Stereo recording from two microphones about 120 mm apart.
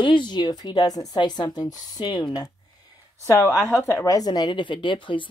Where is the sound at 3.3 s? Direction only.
25° left (ahead or behind).